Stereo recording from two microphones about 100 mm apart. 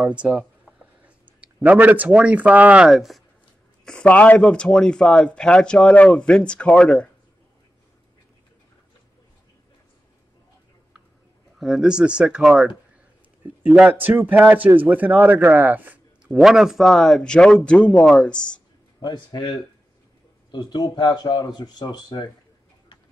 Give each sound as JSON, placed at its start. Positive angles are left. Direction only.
{"t": 1.0, "sound": "speech", "side_deg": -15}
{"t": 2.9, "sound": "speech", "side_deg": 0}
{"t": 3.8, "sound": "a man's voice", "side_deg": 10}
{"t": 11.5, "sound": "speech", "side_deg": -5}
{"t": 13.8, "sound": "speech", "side_deg": -20}
{"t": 18.9, "sound": "speech", "side_deg": 45}